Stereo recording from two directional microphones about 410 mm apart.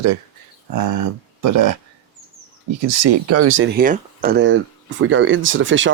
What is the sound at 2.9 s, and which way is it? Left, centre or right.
Speech, right.